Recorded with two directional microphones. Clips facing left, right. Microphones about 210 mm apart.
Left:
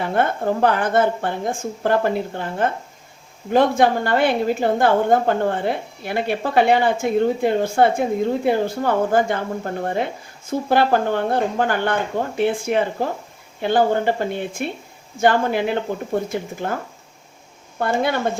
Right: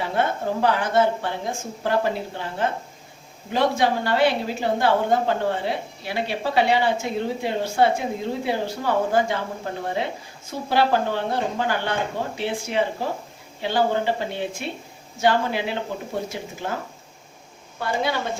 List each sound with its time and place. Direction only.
0.0 s a woman's voice: 50° left (ahead or behind)
17.7 s a woman's voice: 55° left (ahead or behind)